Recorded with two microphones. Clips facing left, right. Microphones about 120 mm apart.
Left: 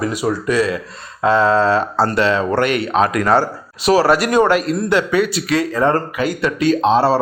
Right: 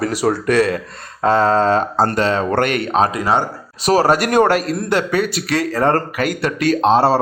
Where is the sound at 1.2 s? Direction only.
45° right (ahead or behind).